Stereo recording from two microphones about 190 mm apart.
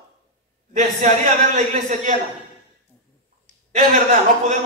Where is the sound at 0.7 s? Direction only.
40° right (ahead or behind).